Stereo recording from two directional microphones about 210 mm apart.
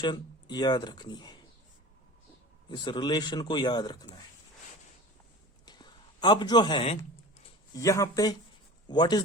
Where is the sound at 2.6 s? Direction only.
20° left (ahead or behind).